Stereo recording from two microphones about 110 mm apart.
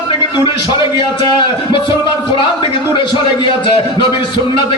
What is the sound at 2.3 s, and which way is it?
A man's voice, 45° left (ahead or behind).